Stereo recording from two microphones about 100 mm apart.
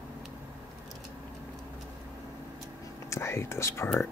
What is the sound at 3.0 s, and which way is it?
Speech, 30° left (ahead or behind).